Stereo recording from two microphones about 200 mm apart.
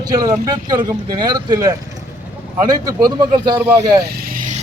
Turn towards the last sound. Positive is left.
turn(degrees=-45)  # may be behind; listen again after turning